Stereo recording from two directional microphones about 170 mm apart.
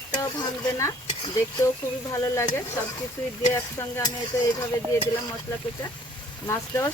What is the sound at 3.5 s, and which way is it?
Speech, 15° left (ahead or behind).